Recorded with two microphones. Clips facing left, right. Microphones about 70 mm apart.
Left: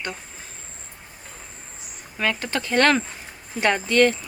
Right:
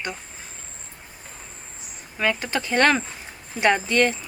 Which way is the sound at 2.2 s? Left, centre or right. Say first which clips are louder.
Right 1 dB; centre.